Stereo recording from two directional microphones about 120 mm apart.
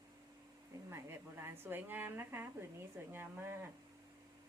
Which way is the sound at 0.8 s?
20° right (ahead or behind).